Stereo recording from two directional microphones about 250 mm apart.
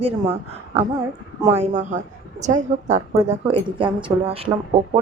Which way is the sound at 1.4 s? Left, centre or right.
Right.